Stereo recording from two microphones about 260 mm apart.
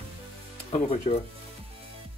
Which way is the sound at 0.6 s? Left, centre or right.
Left.